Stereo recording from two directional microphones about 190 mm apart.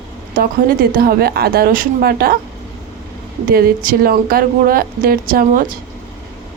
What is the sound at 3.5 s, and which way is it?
A woman's voice, 50° right (ahead or behind).